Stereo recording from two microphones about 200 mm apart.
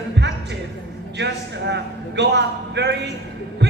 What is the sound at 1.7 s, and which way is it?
A man's voice, 60° right (ahead or behind).